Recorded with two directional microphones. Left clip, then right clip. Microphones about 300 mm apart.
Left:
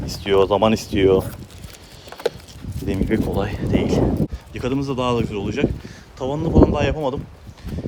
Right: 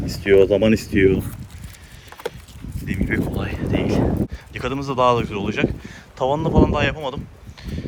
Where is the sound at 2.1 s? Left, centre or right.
Centre.